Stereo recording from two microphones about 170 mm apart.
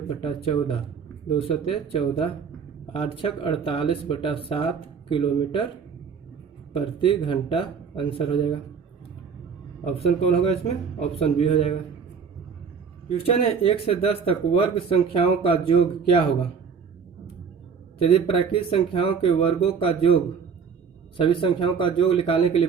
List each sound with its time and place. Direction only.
0.2 s speech: 30° left (ahead or behind)
6.7 s speech: 30° left (ahead or behind)
9.8 s speech: 35° left (ahead or behind)
13.1 s speech: 35° left (ahead or behind)
18.0 s speech: 35° left (ahead or behind)
21.2 s speech: 30° left (ahead or behind)